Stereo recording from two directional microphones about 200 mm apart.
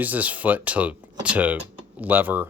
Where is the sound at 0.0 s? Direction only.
10° right (ahead or behind).